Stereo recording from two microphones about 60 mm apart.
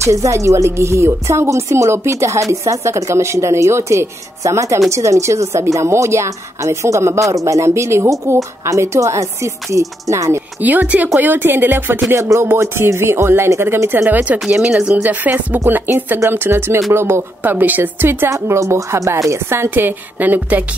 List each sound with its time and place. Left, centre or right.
0.0 s a woman's voice: right
8.6 s a woman's voice: right
10.6 s a woman's voice: right
12.2 s a woman's voice: right
14.1 s speech: right
15.2 s a woman's voice: right
17.4 s a woman's voice: right
18.3 s a woman's voice: right
19.3 s a woman's voice: right